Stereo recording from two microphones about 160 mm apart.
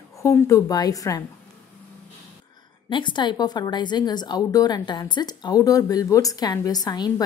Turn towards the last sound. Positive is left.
turn(degrees=25)  # may be behind; listen again after turning